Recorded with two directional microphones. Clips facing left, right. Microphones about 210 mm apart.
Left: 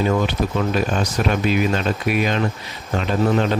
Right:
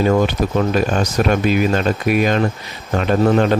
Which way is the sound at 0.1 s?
45° right (ahead or behind).